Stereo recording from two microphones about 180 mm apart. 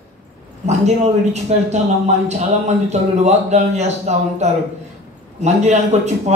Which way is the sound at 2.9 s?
40° right (ahead or behind).